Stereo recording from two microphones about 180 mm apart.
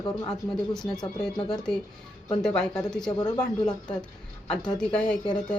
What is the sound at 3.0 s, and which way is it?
Speech, 25° left (ahead or behind).